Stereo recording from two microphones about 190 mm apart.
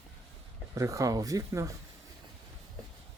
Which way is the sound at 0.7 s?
15° right (ahead or behind).